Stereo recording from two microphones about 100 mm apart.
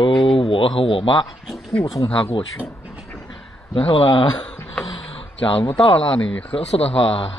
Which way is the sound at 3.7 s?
60° left (ahead or behind).